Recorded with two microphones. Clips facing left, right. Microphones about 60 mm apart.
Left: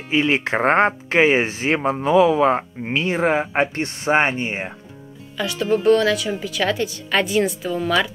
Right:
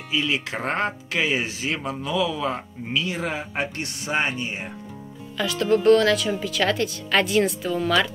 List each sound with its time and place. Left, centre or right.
0.1 s speech: left
5.4 s a woman's voice: centre